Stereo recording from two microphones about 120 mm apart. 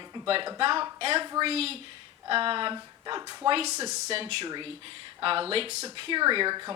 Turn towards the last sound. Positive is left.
turn(degrees=-35)  # may be behind; listen again after turning